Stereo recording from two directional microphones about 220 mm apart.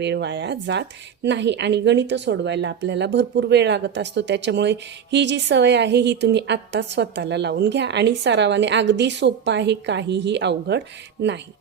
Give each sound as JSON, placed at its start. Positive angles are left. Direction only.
{"t": 0.0, "sound": "speech", "side_deg": -50}